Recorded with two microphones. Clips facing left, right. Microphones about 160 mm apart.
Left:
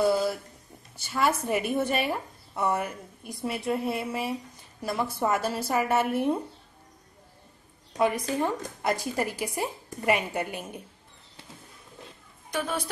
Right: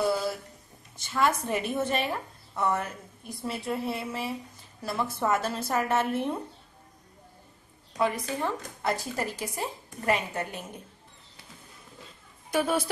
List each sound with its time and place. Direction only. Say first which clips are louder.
0.9 s a woman's voice: even; 10° left (ahead or behind)
8.0 s a woman's voice: left 3 dB; 15° left (ahead or behind)
12.4 s a woman's voice: right 4 dB; 10° right (ahead or behind)